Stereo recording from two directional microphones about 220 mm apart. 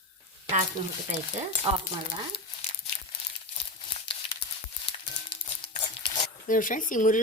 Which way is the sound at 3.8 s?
25° left (ahead or behind).